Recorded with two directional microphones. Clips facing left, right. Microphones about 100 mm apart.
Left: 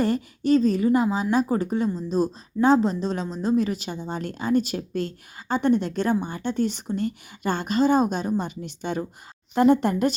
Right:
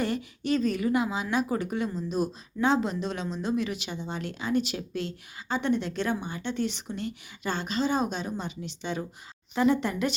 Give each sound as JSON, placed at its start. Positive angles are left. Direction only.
{"t": 0.0, "sound": "a woman's voice", "side_deg": 40}